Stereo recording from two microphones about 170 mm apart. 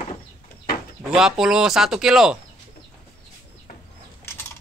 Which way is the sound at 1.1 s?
5° right (ahead or behind).